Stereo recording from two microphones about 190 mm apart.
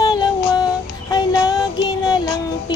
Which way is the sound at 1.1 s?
20° left (ahead or behind).